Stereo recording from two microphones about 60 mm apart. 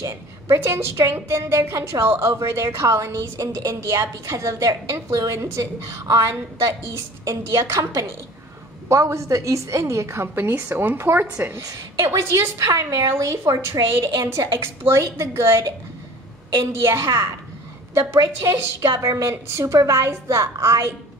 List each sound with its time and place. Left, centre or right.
0.0 s a sound: right
0.7 s a woman's voice: right
5.3 s a woman's voice: right
11.2 s a woman's voice: right
12.5 s a woman's voice: right
14.0 s a woman's voice: right
16.8 s a woman's voice: right
19.8 s a woman's voice: right